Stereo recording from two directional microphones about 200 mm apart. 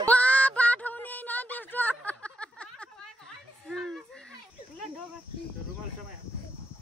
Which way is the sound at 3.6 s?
Centre (ahead or behind).